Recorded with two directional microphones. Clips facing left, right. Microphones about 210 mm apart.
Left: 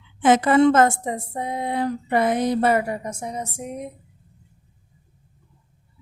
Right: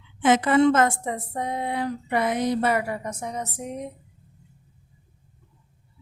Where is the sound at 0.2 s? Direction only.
40° left (ahead or behind).